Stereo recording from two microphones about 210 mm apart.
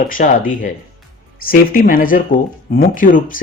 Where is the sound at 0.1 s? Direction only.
40° left (ahead or behind).